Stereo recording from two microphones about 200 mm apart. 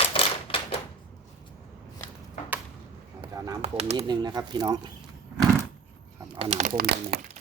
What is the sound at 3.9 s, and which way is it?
Speech, 20° right (ahead or behind).